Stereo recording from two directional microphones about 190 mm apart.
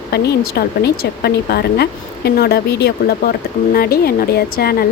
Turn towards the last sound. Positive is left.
turn(degrees=55)  # may be behind; listen again after turning